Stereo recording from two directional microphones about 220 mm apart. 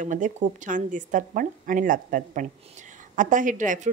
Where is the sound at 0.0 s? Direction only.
35° right (ahead or behind).